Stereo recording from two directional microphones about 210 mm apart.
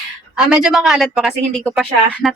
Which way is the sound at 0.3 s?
5° right (ahead or behind).